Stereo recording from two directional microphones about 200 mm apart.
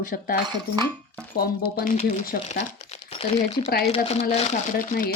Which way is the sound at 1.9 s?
35° left (ahead or behind).